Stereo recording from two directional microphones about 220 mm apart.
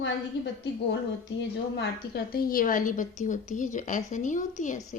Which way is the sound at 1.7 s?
45° left (ahead or behind).